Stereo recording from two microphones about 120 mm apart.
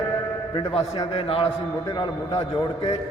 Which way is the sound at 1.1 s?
50° left (ahead or behind).